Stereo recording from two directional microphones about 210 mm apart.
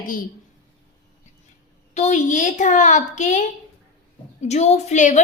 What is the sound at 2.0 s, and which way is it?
A woman's voice, 35° left (ahead or behind).